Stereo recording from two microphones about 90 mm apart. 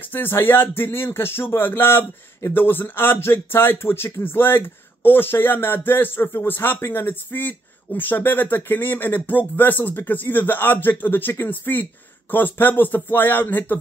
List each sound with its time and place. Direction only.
0.1 s speech: 25° left (ahead or behind)